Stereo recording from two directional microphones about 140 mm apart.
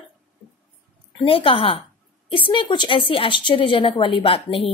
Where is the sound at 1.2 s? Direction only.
40° left (ahead or behind).